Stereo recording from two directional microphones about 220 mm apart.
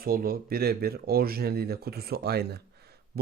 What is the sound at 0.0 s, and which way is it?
Speech, 40° right (ahead or behind).